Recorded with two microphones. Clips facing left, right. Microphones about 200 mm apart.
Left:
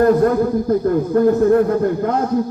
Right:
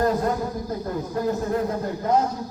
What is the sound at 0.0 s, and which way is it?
A man's voice, 60° left (ahead or behind).